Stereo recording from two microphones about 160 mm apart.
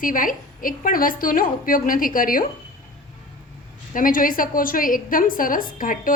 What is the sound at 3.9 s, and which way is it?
A woman's voice, 60° left (ahead or behind).